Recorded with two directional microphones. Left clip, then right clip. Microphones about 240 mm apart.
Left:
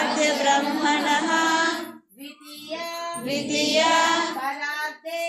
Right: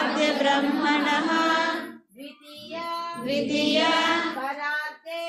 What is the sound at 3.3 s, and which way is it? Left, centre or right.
Female singing, centre.